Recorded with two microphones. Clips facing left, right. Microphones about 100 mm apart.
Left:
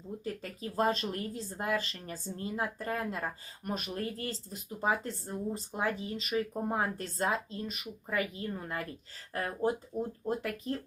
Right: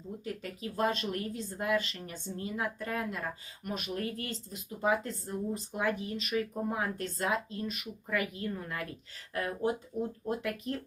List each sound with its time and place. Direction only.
0.6 s speech: 35° left (ahead or behind)